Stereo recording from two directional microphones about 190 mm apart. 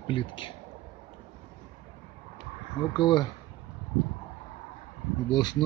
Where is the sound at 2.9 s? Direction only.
25° left (ahead or behind).